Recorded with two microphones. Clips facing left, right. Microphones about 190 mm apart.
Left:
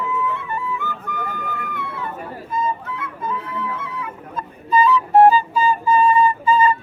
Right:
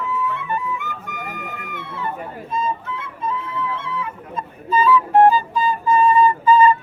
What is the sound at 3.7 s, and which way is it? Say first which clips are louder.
Music: right 2 dB; 30° right (ahead or behind).